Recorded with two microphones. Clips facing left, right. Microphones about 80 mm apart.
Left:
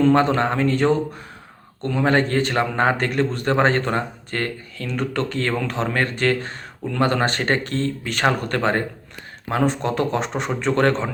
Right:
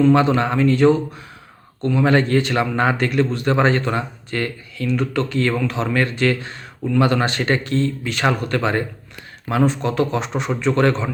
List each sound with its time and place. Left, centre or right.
0.0 s speech: left